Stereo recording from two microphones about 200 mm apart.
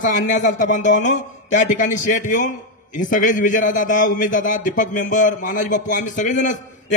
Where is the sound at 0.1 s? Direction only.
40° left (ahead or behind).